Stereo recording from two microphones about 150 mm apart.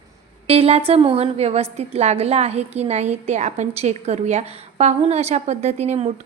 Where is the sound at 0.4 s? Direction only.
40° right (ahead or behind).